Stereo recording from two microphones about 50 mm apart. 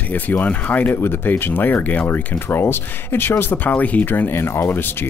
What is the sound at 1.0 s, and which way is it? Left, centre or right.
Speech, left.